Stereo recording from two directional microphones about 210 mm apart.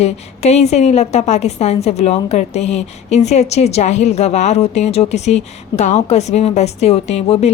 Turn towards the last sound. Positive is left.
turn(degrees=30)  # may be behind; listen again after turning